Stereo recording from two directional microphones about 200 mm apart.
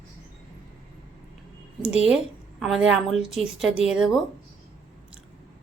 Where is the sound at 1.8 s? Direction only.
5° right (ahead or behind).